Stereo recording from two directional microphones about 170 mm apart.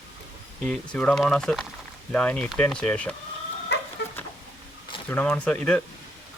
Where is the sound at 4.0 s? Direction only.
80° left.